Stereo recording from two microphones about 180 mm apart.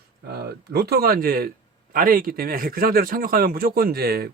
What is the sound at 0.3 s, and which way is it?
A man's voice, 60° right (ahead or behind).